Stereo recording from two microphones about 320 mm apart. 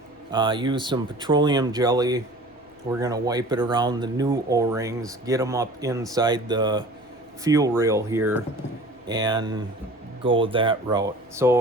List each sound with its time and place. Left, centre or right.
0.3 s speech: centre